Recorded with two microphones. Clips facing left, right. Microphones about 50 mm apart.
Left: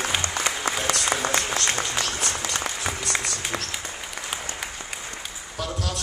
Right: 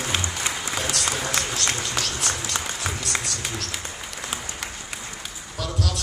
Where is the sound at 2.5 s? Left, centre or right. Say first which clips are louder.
Left 1 dB; centre.